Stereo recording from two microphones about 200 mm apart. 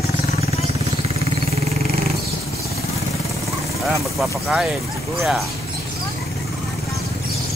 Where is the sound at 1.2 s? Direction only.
30° right (ahead or behind).